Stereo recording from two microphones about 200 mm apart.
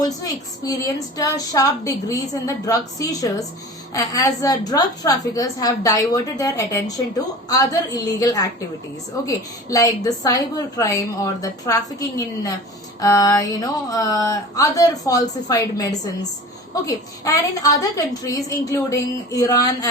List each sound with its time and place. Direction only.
0.0 s a woman's voice: 20° left (ahead or behind)